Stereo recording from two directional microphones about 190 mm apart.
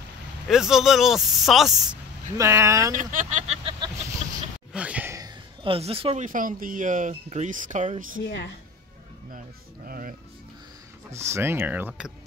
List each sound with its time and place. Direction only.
0.5 s speech: centre (ahead or behind)
2.3 s speech: 15° right (ahead or behind)
2.9 s speech: 45° right (ahead or behind)
4.7 s speech: 5° right (ahead or behind); by 8.1 s 40° right (ahead or behind)
8.2 s speech: 65° left (ahead or behind)
9.8 s music: 50° right (ahead or behind)
11.1 s speech: 15° right (ahead or behind)